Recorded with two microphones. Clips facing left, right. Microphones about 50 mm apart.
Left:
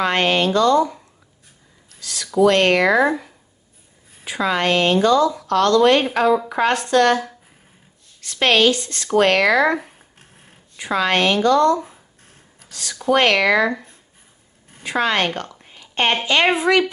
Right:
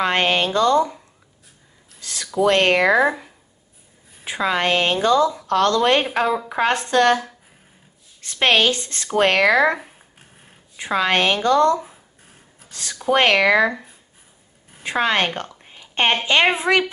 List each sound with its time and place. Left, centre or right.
0.0 s speech: right
2.0 s a sound: right
2.4 s speech: centre
8.2 s speech: right
9.8 s a sound: centre
10.8 s speech: centre
12.5 s a sound: right
13.1 s speech: right
13.7 s speech: centre
14.8 s a woman's voice: right